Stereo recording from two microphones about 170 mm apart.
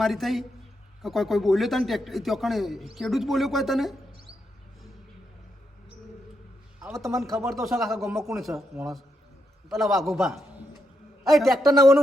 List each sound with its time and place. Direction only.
0.0 s a man's voice: centre (ahead or behind)
6.9 s a man's voice: 20° right (ahead or behind)
7.5 s a man's voice: centre (ahead or behind)